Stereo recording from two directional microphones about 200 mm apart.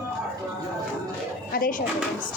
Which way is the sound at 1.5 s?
45° left (ahead or behind).